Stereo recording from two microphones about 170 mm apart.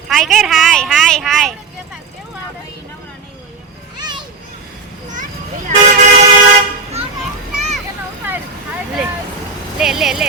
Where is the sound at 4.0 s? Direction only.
25° right (ahead or behind).